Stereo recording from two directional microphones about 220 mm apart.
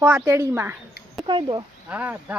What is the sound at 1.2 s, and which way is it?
Speech, 20° right (ahead or behind).